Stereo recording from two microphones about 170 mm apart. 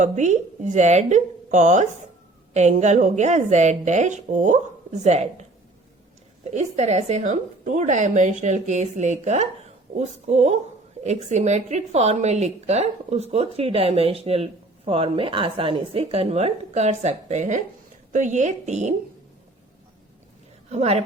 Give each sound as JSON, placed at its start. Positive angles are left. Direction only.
{"t": 0.0, "sound": "a woman's voice", "side_deg": -45}
{"t": 20.7, "sound": "speech", "side_deg": -40}